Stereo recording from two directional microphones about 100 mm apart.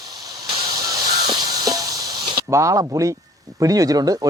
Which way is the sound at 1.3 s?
40° right (ahead or behind).